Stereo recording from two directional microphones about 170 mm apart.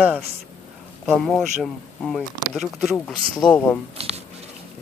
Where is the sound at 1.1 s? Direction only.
5° left (ahead or behind).